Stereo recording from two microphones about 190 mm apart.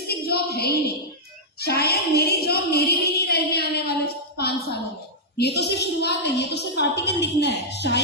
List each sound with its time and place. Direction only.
0.1 s a woman's voice: 55° left (ahead or behind)